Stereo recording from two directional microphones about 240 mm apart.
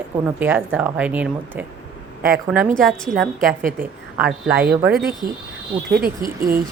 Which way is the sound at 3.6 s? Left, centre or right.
Right.